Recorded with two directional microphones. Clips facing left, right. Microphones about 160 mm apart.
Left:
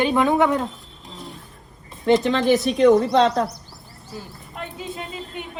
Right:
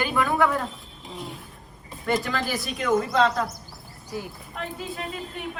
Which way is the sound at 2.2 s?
20° left (ahead or behind).